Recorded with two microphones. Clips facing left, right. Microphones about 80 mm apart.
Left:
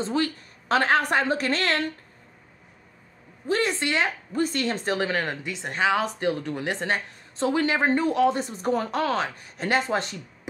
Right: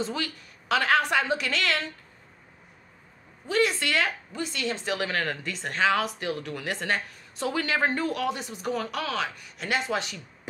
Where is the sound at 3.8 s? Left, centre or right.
Left.